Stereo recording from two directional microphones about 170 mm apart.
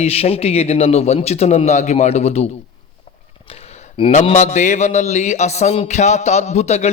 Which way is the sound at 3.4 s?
35° left (ahead or behind).